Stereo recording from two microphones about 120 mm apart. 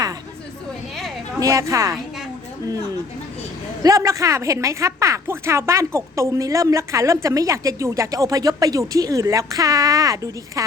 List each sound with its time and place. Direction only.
1.4 s speech: 30° right (ahead or behind)
3.8 s speech: 30° right (ahead or behind)